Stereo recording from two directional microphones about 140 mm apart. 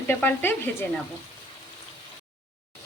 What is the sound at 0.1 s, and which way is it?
Speech, 15° left (ahead or behind).